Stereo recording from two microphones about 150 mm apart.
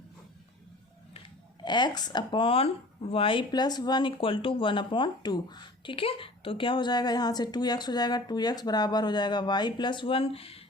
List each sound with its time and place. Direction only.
1.6 s speech: 30° left (ahead or behind)